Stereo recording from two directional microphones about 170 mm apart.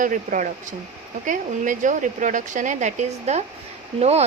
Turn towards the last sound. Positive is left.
turn(degrees=-40)  # may be behind; listen again after turning